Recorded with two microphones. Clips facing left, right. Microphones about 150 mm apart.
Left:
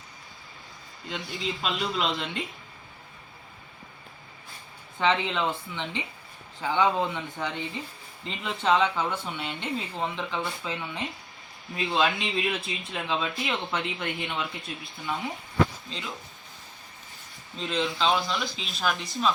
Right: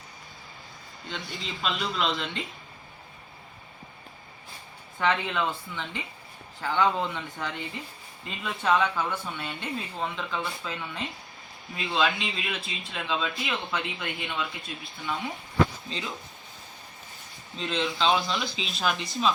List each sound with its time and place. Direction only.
1.0 s speech: centre (ahead or behind)
4.9 s speech: 20° left (ahead or behind)
11.8 s speech: centre (ahead or behind)
14.1 s speech: 25° left (ahead or behind)
14.7 s speech: centre (ahead or behind)
17.5 s speech: centre (ahead or behind)